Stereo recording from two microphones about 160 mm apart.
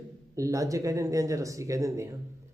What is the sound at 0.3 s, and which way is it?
A man's voice, 20° right (ahead or behind).